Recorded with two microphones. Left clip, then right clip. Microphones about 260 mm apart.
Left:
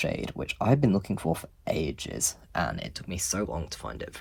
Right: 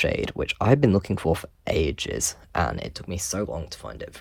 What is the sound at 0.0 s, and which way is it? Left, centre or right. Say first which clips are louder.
Speech: right 7 dB; right.